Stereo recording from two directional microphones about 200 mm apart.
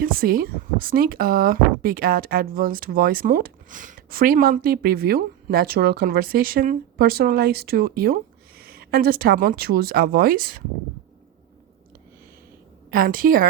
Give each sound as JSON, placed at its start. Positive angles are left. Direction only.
{"t": 0.0, "sound": "speech", "side_deg": -45}
{"t": 12.9, "sound": "speech", "side_deg": -45}